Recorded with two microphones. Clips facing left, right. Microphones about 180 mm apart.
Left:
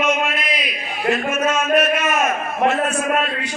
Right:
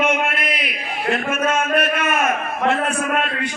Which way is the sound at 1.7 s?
55° right (ahead or behind).